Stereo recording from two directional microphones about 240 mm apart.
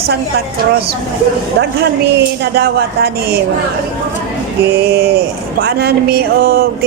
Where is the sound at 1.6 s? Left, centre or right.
Right.